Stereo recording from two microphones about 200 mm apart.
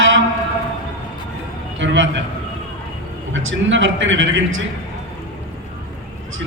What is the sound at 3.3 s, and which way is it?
Speech, 70° right (ahead or behind).